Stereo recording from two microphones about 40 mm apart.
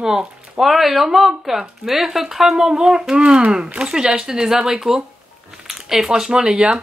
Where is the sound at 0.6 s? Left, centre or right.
Centre.